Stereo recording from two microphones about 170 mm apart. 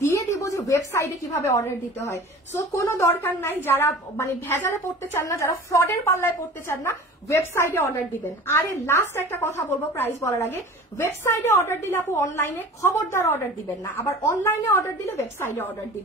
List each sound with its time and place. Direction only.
0.0 s a woman's voice: 20° left (ahead or behind)